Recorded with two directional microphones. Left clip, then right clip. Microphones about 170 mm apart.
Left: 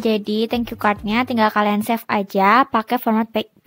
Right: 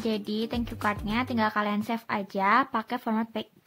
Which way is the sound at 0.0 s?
50° left (ahead or behind).